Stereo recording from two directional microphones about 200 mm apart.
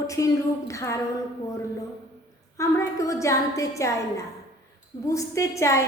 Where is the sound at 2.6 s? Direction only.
15° left (ahead or behind).